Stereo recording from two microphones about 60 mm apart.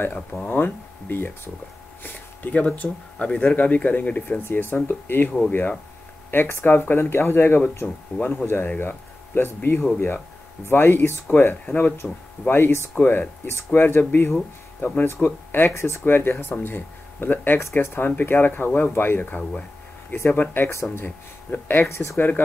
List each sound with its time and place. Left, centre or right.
0.1 s speech: left
6.3 s speech: left
13.0 s speech: left
15.7 s speech: left
21.8 s speech: left